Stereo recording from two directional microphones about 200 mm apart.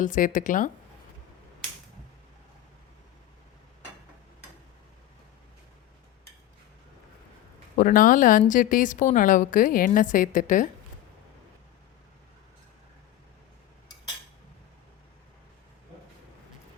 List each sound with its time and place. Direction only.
0.0 s a woman's voice: 40° left (ahead or behind)
7.8 s a woman's voice: 40° left (ahead or behind)